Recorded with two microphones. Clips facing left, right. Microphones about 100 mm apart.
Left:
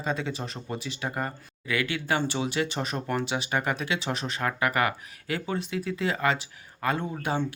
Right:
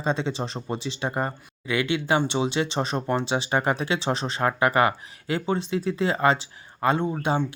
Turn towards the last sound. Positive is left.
turn(degrees=-25)  # may be behind; listen again after turning